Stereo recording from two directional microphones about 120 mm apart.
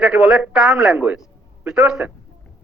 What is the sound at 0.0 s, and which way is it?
A woman's voice, 5° right (ahead or behind).